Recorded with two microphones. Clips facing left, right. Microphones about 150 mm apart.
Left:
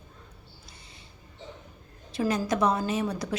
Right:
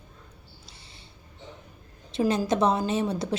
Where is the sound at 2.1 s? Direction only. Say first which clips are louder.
Right 3 dB; 25° right (ahead or behind).